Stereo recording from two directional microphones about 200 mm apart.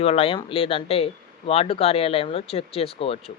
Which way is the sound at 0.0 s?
30° left (ahead or behind).